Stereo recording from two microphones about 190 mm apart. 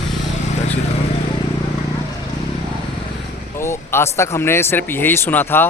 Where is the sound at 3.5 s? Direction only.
15° left (ahead or behind).